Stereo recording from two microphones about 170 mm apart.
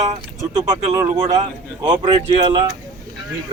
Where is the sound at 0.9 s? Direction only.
20° right (ahead or behind).